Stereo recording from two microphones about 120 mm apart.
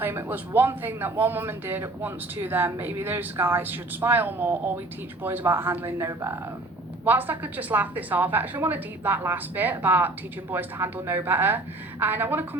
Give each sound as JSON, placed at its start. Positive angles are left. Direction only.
{"t": 0.0, "sound": "speech", "side_deg": -20}